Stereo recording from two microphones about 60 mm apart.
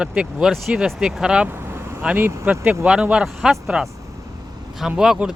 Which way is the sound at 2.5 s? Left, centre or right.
Right.